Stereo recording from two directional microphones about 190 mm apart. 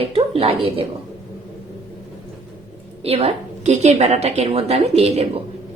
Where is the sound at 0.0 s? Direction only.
30° right (ahead or behind).